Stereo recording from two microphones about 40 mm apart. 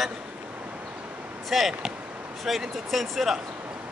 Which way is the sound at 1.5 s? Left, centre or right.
Centre.